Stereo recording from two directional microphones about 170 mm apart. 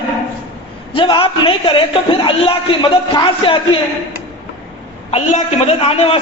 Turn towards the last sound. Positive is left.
turn(degrees=35)  # may be behind; listen again after turning